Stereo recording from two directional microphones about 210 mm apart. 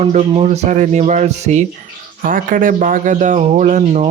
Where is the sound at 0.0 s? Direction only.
30° right (ahead or behind).